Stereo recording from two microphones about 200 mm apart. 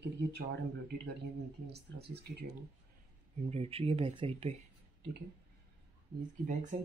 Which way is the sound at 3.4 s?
30° right (ahead or behind).